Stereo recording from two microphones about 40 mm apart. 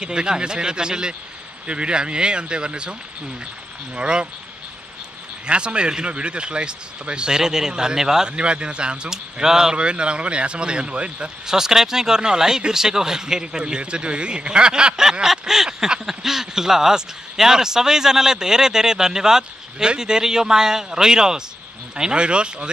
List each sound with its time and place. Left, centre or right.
0.0 s speech: right
5.5 s speech: right
8.3 s speech: right
9.1 s speech: centre
9.8 s speech: right
11.4 s speech: centre